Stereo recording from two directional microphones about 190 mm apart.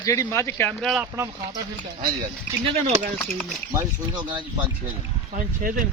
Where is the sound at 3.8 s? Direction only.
25° right (ahead or behind).